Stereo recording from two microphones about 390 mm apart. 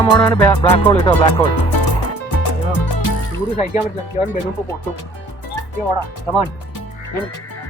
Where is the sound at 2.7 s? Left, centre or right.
Left.